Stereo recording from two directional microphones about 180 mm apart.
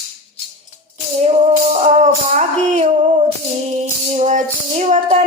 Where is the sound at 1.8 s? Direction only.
40° right (ahead or behind).